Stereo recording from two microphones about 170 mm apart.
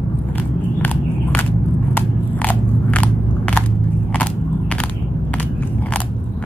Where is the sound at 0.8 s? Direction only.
10° left (ahead or behind).